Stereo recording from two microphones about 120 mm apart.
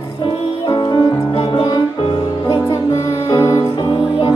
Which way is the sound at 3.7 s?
40° left (ahead or behind).